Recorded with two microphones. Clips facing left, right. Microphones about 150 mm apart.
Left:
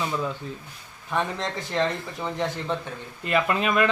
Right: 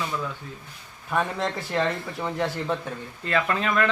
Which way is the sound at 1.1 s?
5° right (ahead or behind).